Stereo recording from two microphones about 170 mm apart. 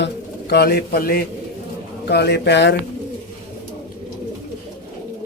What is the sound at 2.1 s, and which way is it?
Speech, 75° left (ahead or behind).